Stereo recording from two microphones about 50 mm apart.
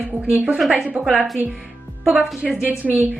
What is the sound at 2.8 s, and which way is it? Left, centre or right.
Speech, right.